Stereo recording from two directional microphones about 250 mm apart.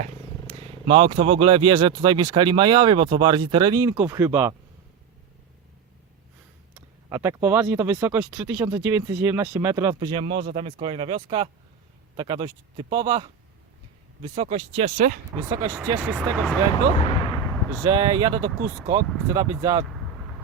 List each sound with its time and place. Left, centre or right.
0.4 s speech: right
7.1 s speech: centre; by 15.2 s right
15.4 s speech: centre
15.8 s speech: centre
16.7 s artillery fire: left
17.5 s artillery fire: centre
17.8 s speech: centre